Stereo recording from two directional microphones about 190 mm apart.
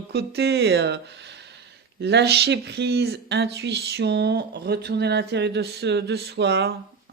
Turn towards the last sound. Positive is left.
turn(degrees=-60)  # may be behind; listen again after turning